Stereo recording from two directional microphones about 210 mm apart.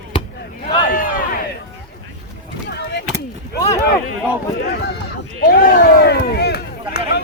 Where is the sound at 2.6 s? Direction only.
50° left (ahead or behind).